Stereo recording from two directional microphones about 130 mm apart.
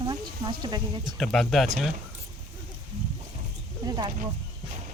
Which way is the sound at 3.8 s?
30° right (ahead or behind).